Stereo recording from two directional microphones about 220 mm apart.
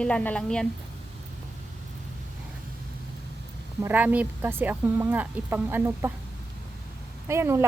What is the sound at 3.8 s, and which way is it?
A woman's voice, 5° right (ahead or behind).